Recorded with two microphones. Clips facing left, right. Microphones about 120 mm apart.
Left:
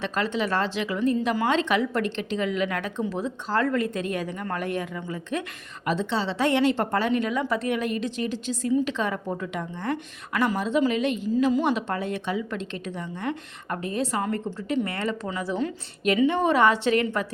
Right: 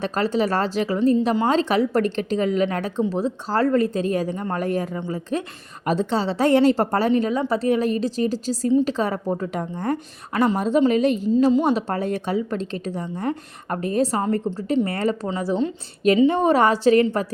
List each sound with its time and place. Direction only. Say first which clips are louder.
0.0 s a woman's voice: right 5 dB; 40° right (ahead or behind)